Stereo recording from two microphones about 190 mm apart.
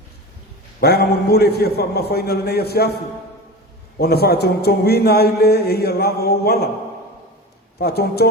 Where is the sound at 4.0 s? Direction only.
55° left (ahead or behind).